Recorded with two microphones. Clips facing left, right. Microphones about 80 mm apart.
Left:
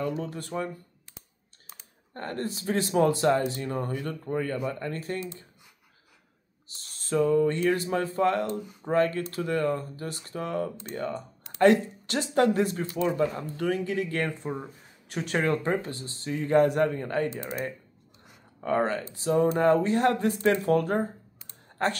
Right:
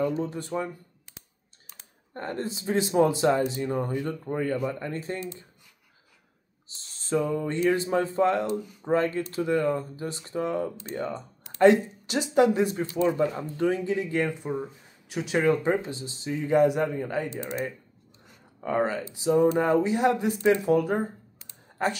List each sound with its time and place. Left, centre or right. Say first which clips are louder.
0.2 s speech: right 3 dB; right
2.1 s speech: right 1 dB; right
6.7 s speech: right 2 dB; right
14.4 s speech: right 3 dB; centre
18.6 s a woman's voice: even; centre